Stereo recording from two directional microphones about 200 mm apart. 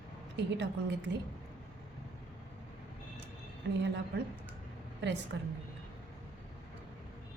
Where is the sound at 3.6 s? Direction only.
60° right (ahead or behind).